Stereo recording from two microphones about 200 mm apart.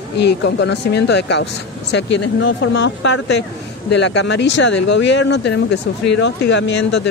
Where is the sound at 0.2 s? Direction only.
60° left (ahead or behind).